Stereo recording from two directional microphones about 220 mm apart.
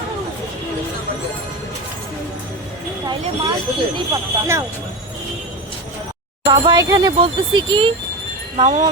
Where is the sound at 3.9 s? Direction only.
15° right (ahead or behind).